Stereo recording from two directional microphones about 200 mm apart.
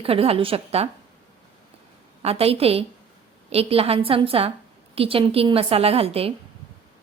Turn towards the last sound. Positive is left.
turn(degrees=-30)  # may be behind; listen again after turning